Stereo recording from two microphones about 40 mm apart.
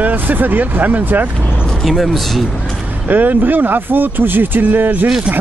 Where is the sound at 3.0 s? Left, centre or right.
Right.